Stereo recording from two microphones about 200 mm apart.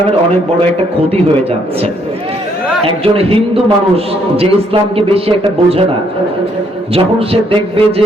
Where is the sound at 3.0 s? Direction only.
30° right (ahead or behind).